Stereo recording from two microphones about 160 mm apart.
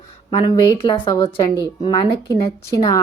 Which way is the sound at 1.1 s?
20° left (ahead or behind).